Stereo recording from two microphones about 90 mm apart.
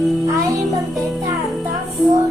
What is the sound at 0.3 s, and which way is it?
Music, 40° right (ahead or behind).